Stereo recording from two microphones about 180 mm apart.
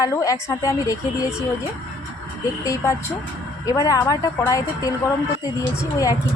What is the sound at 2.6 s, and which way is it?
Speech, 20° left (ahead or behind).